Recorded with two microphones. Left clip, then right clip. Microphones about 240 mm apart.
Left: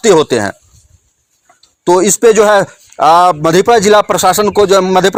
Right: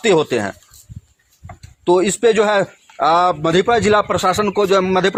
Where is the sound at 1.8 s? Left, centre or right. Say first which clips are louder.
Left 6 dB; left.